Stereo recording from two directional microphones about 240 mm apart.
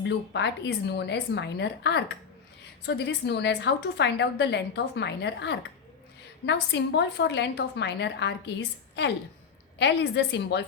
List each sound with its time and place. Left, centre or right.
0.0 s a woman's voice: left